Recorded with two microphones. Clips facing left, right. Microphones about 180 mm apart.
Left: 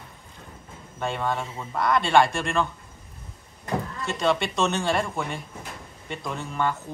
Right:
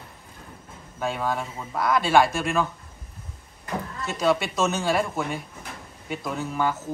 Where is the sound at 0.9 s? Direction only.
5° right (ahead or behind).